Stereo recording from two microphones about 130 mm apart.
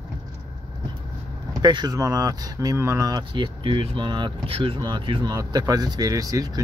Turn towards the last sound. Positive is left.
turn(degrees=-25)  # may be behind; listen again after turning